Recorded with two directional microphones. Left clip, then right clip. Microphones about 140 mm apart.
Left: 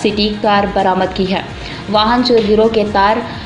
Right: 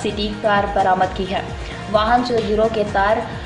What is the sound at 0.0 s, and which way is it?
A woman's voice, 30° left (ahead or behind).